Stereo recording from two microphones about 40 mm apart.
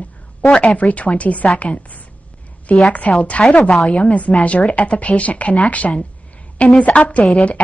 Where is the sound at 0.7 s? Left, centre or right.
Left.